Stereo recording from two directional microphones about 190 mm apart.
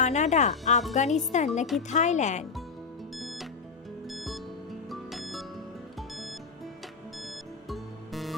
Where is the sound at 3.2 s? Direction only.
Centre (ahead or behind).